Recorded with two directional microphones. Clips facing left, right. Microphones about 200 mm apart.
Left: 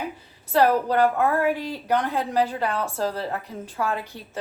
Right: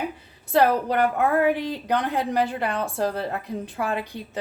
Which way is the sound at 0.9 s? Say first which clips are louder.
Left 1 dB; 20° right (ahead or behind).